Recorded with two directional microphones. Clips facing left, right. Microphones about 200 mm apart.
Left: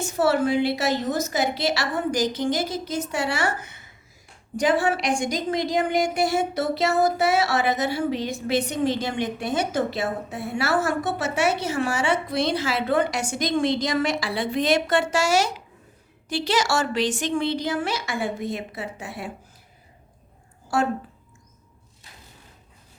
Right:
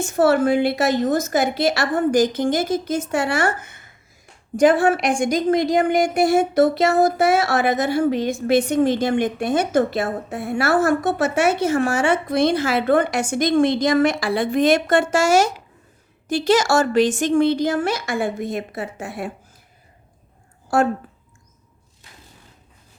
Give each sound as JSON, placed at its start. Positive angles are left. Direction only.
{"t": 0.0, "sound": "a woman's voice", "side_deg": -50}
{"t": 20.7, "sound": "a woman's voice", "side_deg": -50}